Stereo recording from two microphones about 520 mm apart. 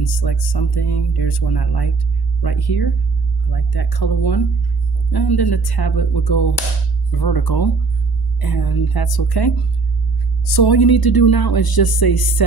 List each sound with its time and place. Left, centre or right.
0.0 s speech: left